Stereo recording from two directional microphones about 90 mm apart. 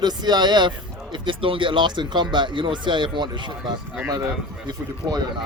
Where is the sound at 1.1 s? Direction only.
70° right (ahead or behind); by 5.4 s 50° right (ahead or behind).